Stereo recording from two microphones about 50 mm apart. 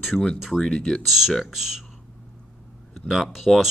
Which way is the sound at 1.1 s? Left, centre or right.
Centre.